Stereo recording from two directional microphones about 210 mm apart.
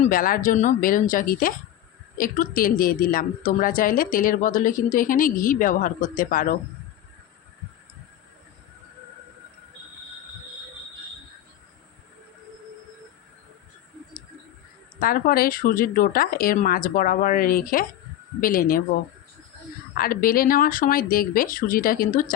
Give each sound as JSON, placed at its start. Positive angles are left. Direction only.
{"t": 0.0, "sound": "a woman's voice", "side_deg": 40}
{"t": 15.0, "sound": "a woman's voice", "side_deg": 45}
{"t": 20.0, "sound": "speech", "side_deg": 45}